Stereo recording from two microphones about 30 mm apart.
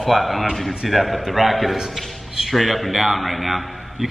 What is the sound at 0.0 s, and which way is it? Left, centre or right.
A man's voice, centre.